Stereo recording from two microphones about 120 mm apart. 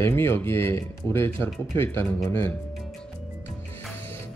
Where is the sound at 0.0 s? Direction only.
20° left (ahead or behind).